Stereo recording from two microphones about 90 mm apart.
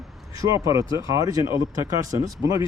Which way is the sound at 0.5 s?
35° right (ahead or behind).